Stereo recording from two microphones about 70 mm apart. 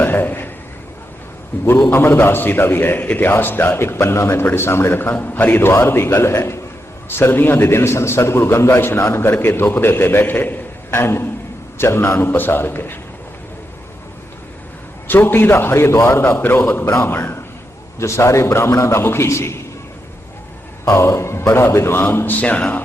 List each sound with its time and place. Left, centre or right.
0.0 s a sound: left
1.8 s a man's voice: left
5.6 s a man's voice: left
15.0 s a man's voice: left
18.0 s a man's voice: left
20.9 s a man's voice: left
22.0 s a man's voice: left